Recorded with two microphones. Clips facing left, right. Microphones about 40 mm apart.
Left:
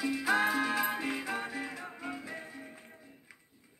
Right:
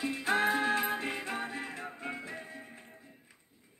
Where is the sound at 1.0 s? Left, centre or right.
Centre.